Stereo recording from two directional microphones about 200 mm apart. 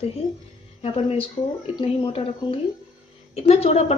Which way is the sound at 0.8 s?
30° left (ahead or behind).